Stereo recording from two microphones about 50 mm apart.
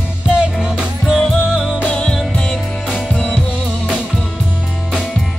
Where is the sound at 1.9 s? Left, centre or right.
Centre.